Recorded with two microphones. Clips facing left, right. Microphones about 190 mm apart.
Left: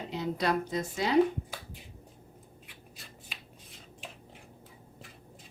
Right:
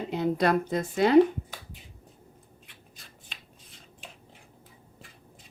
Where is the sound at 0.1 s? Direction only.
55° right (ahead or behind).